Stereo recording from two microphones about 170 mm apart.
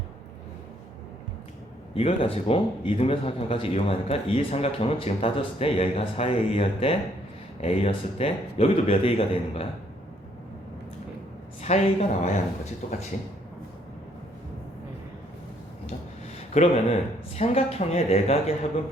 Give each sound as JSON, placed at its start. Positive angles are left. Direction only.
{"t": 2.0, "sound": "a man's voice", "side_deg": 35}
{"t": 11.6, "sound": "a man's voice", "side_deg": 40}
{"t": 16.6, "sound": "a man's voice", "side_deg": 40}